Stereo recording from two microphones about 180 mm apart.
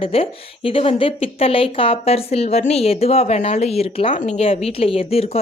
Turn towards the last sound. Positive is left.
turn(degrees=35)  # may be behind; listen again after turning